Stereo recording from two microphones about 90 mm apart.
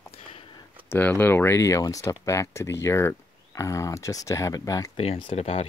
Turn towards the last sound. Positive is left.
turn(degrees=90)